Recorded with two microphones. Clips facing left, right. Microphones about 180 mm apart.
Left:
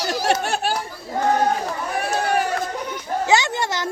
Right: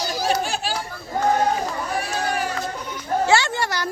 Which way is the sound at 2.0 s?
55° left (ahead or behind).